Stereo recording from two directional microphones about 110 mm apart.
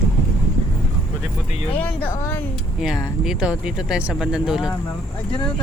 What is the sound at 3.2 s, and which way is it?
Speech, 5° right (ahead or behind).